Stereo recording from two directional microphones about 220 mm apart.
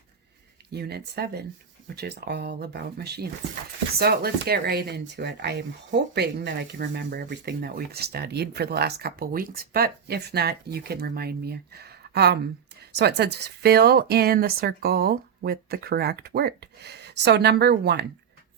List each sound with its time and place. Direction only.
0.7 s speech: 45° right (ahead or behind)